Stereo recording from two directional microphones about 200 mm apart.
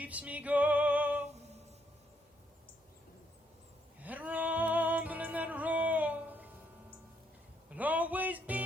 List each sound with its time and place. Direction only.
0.0 s music: 5° right (ahead or behind)
4.0 s music: 10° right (ahead or behind)
7.7 s music: 10° right (ahead or behind)